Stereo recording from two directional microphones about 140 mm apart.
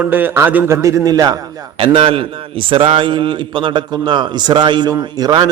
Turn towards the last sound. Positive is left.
turn(degrees=-30)  # may be behind; listen again after turning